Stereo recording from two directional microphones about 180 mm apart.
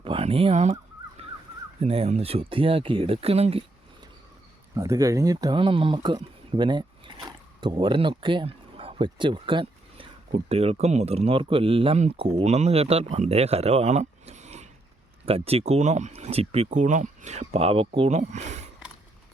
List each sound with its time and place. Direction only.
0.0 s speech: 30° right (ahead or behind)
1.2 s a sound: 35° right (ahead or behind)
1.8 s speech: 35° right (ahead or behind)
4.7 s speech: 20° right (ahead or behind); by 18.7 s 40° right (ahead or behind)